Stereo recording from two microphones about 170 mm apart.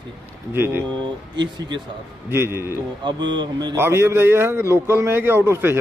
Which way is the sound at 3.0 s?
25° right (ahead or behind).